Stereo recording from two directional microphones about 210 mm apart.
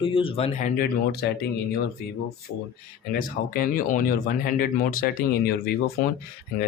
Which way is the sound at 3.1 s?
40° left (ahead or behind).